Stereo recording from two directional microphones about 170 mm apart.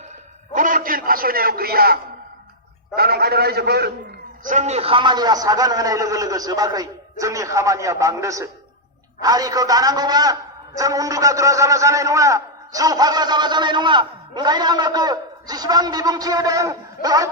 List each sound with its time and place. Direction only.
0.5 s a man's voice: 50° right (ahead or behind); by 3.9 s 70° right (ahead or behind)
4.4 s a man's voice: 45° right (ahead or behind); by 17.2 s 20° right (ahead or behind)